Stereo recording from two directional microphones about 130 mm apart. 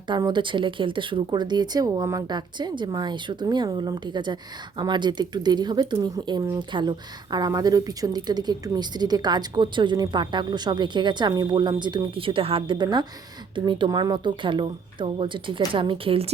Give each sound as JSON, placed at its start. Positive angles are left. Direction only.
{"t": 0.1, "sound": "speech", "side_deg": -35}